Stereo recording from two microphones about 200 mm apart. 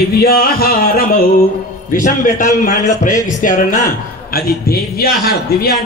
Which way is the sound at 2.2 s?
40° left (ahead or behind).